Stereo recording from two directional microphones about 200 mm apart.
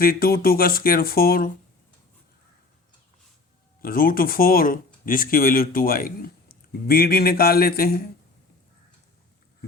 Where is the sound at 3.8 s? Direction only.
45° left (ahead or behind).